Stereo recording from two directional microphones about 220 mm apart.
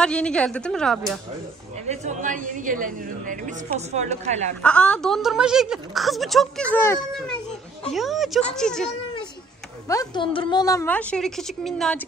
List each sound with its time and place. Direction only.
0.0 s a woman's voice: 5° left (ahead or behind)
1.9 s a woman's voice: 35° right (ahead or behind)
4.6 s a woman's voice: 5° left (ahead or behind)
9.8 s a woman's voice: 15° left (ahead or behind); by 12.0 s centre (ahead or behind)